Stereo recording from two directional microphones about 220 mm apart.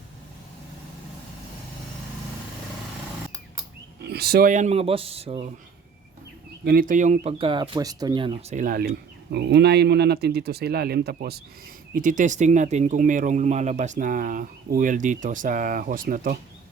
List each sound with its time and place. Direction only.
4.1 s speech: 45° right (ahead or behind); by 5.5 s 25° right (ahead or behind)
6.7 s speech: 40° right (ahead or behind)
9.3 s speech: 50° right (ahead or behind)